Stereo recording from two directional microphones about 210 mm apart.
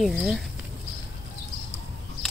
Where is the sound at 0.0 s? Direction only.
Centre (ahead or behind).